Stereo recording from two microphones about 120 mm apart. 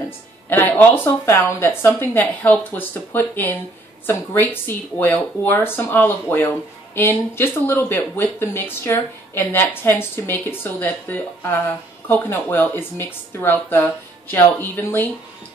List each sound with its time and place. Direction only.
0.5 s speech: 15° left (ahead or behind)